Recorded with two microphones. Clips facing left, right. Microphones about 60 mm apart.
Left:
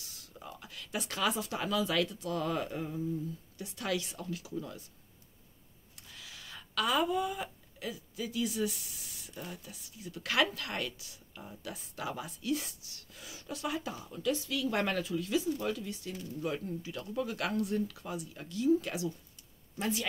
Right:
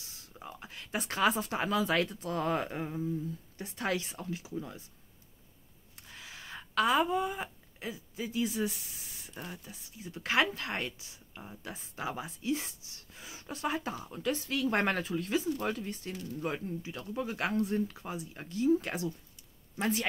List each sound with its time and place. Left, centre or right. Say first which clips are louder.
0.0 s speech: right 1 dB; right
6.0 s speech: right 3 dB; right